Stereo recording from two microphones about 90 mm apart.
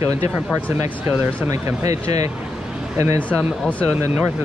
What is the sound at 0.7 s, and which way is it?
Speech, 25° right (ahead or behind).